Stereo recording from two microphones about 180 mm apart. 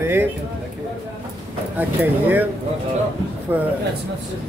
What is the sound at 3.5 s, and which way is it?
Speech, 10° right (ahead or behind).